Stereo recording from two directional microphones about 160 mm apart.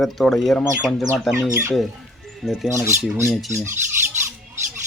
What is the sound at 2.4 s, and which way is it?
Speech, centre (ahead or behind).